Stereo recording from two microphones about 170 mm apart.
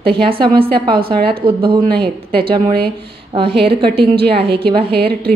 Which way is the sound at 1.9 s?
65° right (ahead or behind).